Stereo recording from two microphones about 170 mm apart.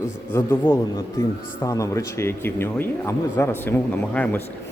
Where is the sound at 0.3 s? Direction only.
15° left (ahead or behind).